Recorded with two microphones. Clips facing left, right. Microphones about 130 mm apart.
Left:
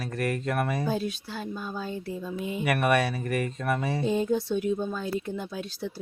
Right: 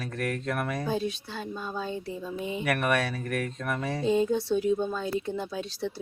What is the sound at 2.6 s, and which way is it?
Speech, 5° left (ahead or behind).